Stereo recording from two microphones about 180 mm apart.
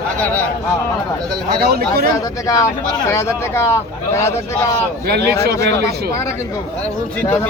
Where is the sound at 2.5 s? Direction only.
20° left (ahead or behind).